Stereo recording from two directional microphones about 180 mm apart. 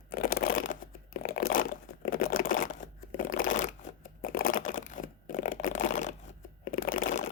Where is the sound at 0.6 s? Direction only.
55° left (ahead or behind).